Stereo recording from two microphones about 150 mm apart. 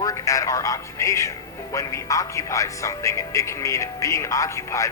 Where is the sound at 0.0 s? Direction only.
20° left (ahead or behind).